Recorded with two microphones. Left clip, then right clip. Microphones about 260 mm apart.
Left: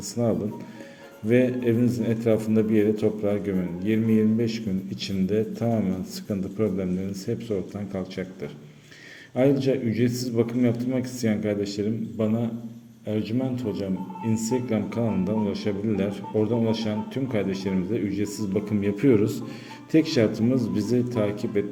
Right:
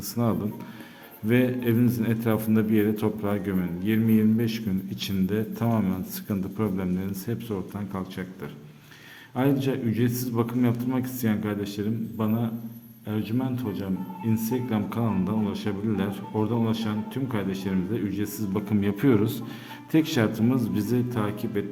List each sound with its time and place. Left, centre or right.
1.3 s a man's voice: centre
9.3 s a man's voice: centre